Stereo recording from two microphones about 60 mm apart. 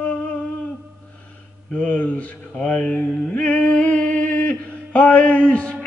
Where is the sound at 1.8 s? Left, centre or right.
Left.